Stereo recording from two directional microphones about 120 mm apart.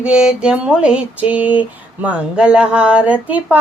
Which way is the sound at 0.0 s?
5° right (ahead or behind).